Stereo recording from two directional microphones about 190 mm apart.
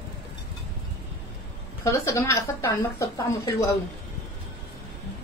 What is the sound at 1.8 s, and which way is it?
Speech, 15° left (ahead or behind).